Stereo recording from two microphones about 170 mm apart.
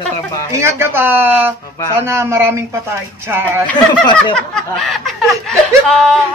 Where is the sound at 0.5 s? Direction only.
15° right (ahead or behind).